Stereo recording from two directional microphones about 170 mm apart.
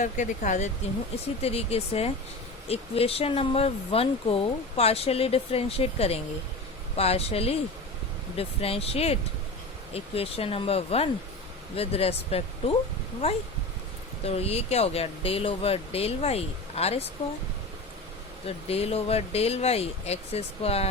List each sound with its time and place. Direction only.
0.0 s speech: 45° left (ahead or behind)
18.4 s speech: 35° left (ahead or behind)